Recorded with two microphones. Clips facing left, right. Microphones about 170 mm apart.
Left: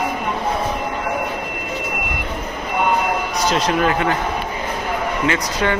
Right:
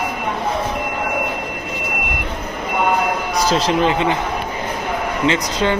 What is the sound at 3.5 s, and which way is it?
Speech, 30° right (ahead or behind).